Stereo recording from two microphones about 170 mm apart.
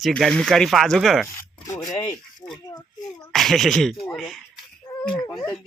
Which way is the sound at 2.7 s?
20° left (ahead or behind).